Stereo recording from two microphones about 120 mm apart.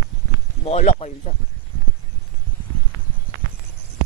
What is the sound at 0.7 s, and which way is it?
Speech, 65° left (ahead or behind).